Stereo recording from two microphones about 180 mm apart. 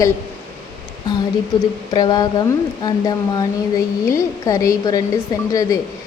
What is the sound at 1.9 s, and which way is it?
A woman's voice, 25° left (ahead or behind).